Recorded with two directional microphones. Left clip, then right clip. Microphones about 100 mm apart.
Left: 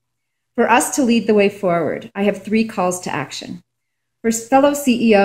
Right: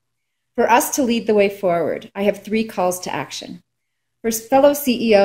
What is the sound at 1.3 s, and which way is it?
A woman's voice, 10° right (ahead or behind).